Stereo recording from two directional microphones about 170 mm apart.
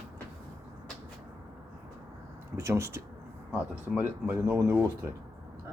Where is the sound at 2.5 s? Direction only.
15° right (ahead or behind).